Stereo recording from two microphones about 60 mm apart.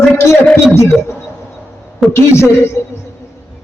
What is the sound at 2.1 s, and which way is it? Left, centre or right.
Speech, left.